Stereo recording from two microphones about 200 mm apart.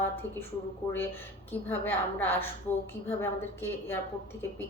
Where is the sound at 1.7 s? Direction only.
10° left (ahead or behind).